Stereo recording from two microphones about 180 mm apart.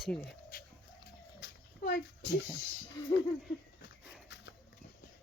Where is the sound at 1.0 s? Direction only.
55° left (ahead or behind).